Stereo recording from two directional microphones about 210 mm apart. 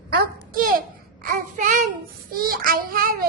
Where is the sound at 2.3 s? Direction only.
45° right (ahead or behind).